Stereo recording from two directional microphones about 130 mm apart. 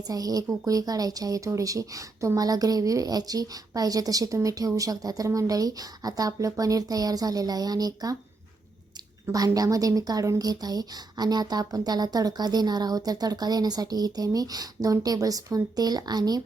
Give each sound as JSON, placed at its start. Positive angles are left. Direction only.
{"t": 0.1, "sound": "speech", "side_deg": -30}
{"t": 9.2, "sound": "a woman's voice", "side_deg": -25}